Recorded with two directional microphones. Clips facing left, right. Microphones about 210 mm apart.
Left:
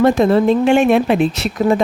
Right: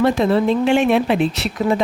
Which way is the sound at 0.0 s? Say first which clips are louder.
Left 4 dB; 45° left (ahead or behind).